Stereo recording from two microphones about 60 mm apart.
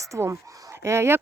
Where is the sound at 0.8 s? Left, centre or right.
Right.